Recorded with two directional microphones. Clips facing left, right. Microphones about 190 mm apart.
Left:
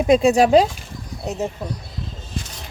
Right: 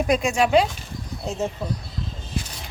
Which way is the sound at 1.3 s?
20° left (ahead or behind).